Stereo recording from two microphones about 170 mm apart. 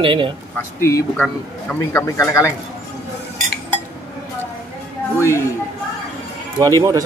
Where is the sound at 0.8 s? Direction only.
15° left (ahead or behind).